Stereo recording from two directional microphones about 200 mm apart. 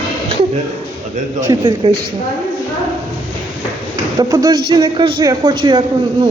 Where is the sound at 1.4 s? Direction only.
20° right (ahead or behind).